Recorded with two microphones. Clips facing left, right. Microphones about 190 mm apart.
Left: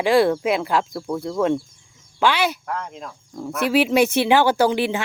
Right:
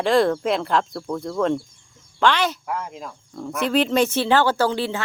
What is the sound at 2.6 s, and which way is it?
Speech, 5° right (ahead or behind).